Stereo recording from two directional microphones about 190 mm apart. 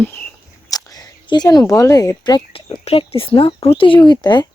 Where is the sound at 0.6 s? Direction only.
20° left (ahead or behind).